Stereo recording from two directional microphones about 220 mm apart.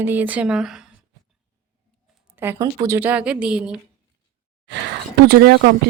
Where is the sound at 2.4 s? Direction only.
15° right (ahead or behind).